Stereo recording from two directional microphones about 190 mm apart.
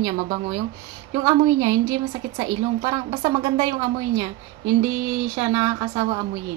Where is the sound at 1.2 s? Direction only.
20° right (ahead or behind).